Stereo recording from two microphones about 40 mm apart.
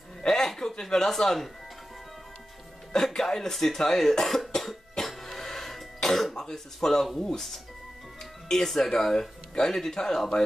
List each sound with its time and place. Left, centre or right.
0.3 s speech: centre
2.9 s speech: centre
4.6 s cough: centre
6.3 s speech: centre
8.5 s speech: centre